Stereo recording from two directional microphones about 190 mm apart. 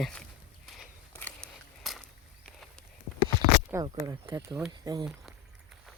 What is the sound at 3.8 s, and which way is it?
Speech, 20° right (ahead or behind).